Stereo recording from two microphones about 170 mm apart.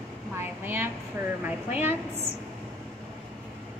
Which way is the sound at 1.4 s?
10° right (ahead or behind).